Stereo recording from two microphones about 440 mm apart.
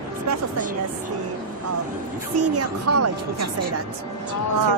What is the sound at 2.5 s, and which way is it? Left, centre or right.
A woman's voice, right.